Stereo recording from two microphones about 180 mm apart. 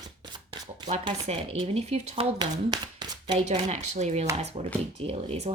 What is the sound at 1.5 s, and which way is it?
Speech, 35° right (ahead or behind).